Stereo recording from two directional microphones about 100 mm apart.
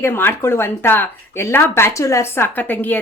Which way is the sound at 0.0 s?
20° left (ahead or behind).